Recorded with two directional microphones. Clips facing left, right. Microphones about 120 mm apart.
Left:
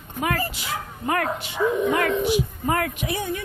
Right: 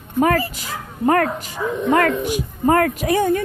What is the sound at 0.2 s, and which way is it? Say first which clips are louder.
Speech: right 8 dB; 40° right (ahead or behind).